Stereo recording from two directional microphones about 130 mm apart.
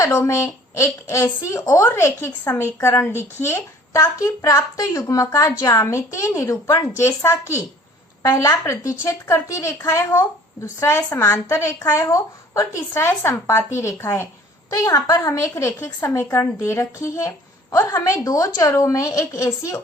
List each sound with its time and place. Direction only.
0.0 s a woman's voice: 25° left (ahead or behind)